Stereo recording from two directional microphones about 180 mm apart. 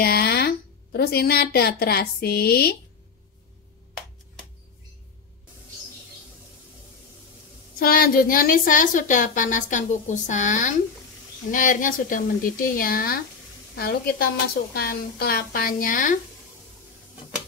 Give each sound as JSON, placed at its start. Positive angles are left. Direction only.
{"t": 0.0, "sound": "a woman's voice", "side_deg": 60}
{"t": 7.8, "sound": "a woman's voice", "side_deg": 55}